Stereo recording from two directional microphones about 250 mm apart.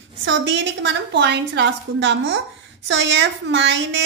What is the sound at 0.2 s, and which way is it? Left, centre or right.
A woman's voice, right.